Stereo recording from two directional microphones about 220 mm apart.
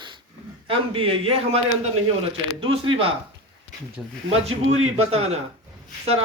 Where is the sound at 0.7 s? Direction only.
25° right (ahead or behind).